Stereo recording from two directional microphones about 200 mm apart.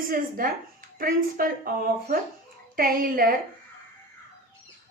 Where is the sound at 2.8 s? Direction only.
45° right (ahead or behind).